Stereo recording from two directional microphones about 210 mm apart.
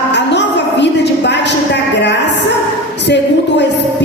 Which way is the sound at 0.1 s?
55° left (ahead or behind).